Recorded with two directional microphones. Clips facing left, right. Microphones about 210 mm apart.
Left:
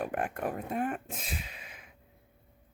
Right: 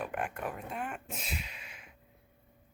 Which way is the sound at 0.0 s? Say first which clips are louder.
Left 4 dB; 35° left (ahead or behind).